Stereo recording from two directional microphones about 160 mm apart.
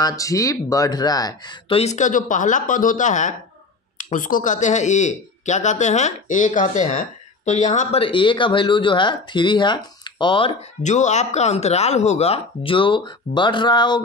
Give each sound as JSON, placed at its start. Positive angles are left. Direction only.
{"t": 0.0, "sound": "speech", "side_deg": 20}
{"t": 1.8, "sound": "speech", "side_deg": 45}
{"t": 8.0, "sound": "speech", "side_deg": 30}
{"t": 10.8, "sound": "speech", "side_deg": 50}